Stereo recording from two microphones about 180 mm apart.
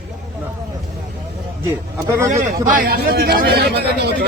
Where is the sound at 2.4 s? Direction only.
50° right (ahead or behind); by 4.3 s 65° right (ahead or behind).